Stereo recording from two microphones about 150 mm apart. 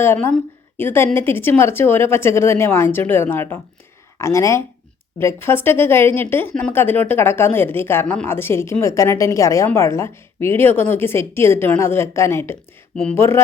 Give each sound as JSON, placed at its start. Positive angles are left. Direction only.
{"t": 0.0, "sound": "speech", "side_deg": 15}